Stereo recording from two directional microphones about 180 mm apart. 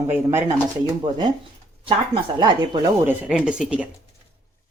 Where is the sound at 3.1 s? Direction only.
5° right (ahead or behind).